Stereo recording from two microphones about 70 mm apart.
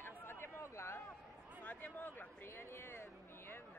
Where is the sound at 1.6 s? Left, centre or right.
Left.